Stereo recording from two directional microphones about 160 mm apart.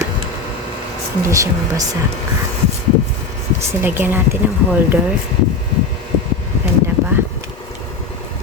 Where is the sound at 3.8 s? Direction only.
15° right (ahead or behind).